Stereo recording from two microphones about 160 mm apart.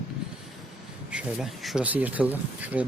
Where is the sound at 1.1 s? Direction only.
5° right (ahead or behind).